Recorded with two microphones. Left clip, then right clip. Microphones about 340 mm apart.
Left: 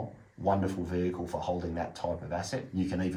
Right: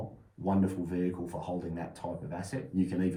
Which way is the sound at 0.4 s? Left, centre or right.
Left.